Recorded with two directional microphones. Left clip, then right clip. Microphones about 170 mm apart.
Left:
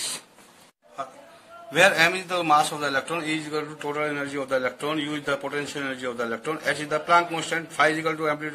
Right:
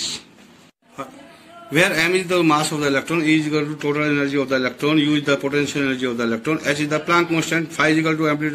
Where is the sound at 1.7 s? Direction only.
30° left (ahead or behind).